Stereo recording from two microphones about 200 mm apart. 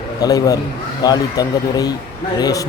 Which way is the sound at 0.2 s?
20° left (ahead or behind).